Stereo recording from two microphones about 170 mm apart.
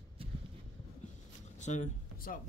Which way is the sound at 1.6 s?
45° left (ahead or behind).